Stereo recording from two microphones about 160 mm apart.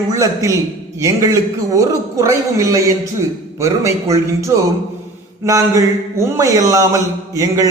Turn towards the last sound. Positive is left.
turn(degrees=-20)  # may be behind; listen again after turning